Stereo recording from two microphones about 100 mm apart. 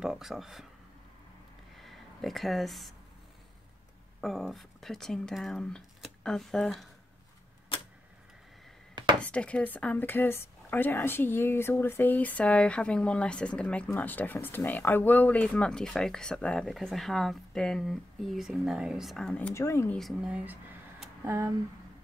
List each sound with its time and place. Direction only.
0.0 s speech: 5° right (ahead or behind)
1.9 s speech: centre (ahead or behind)
4.2 s speech: centre (ahead or behind)
9.2 s a woman's voice: 10° left (ahead or behind); by 19.1 s 5° right (ahead or behind)
19.1 s a woman's voice: 10° left (ahead or behind)
19.5 s speech: 30° left (ahead or behind)
20.0 s speech: centre (ahead or behind)
20.2 s speech: 10° right (ahead or behind)
21.2 s speech: 30° right (ahead or behind)